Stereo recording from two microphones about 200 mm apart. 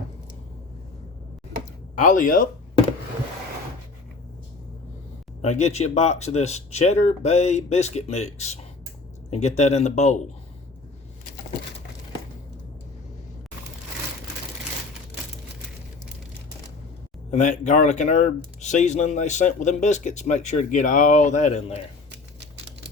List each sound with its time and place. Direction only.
2.0 s speech: 40° left (ahead or behind)
5.4 s speech: 35° left (ahead or behind)
17.3 s speech: 35° left (ahead or behind)
22.4 s typewriter: 60° right (ahead or behind)